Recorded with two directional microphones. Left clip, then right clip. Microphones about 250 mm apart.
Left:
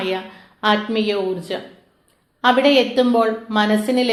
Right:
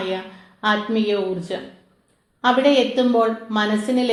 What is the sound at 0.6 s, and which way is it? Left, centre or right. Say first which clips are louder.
Speech: left 2 dB; left.